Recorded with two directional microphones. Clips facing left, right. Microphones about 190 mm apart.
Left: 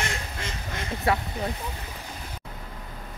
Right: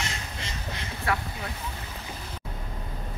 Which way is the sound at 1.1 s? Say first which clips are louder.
Left 4 dB; 25° left (ahead or behind).